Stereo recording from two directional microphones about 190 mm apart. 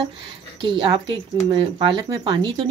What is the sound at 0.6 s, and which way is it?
Speech, 25° right (ahead or behind).